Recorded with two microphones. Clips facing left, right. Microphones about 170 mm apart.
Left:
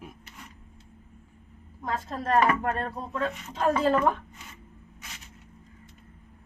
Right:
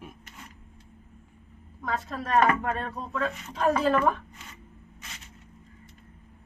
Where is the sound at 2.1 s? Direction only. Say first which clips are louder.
Even; 30° left (ahead or behind).